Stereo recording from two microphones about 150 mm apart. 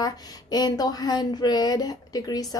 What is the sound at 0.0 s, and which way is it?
A woman's voice, 25° left (ahead or behind).